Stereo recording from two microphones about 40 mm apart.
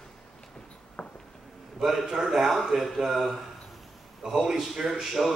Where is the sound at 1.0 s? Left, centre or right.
Left.